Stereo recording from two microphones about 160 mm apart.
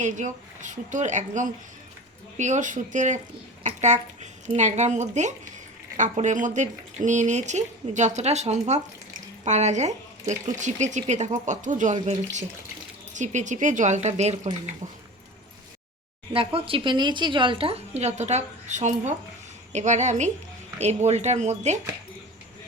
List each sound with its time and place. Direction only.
0.0 s speech: 50° right (ahead or behind)
16.3 s speech: 35° right (ahead or behind)